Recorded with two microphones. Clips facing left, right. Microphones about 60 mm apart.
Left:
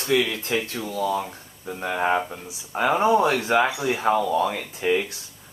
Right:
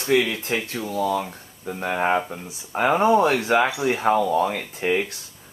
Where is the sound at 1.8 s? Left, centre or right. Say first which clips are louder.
Right 1 dB; right.